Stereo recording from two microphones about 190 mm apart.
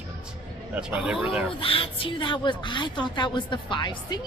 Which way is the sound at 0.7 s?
5° right (ahead or behind).